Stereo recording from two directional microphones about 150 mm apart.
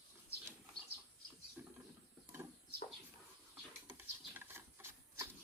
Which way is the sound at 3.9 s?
15° right (ahead or behind).